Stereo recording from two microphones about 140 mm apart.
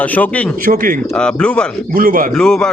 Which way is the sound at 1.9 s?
85° right.